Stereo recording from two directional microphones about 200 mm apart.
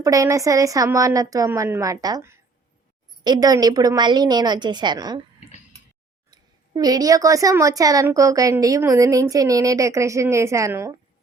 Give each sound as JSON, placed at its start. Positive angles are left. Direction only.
{"t": 0.0, "sound": "a woman's voice", "side_deg": -15}
{"t": 6.3, "sound": "a woman's voice", "side_deg": -20}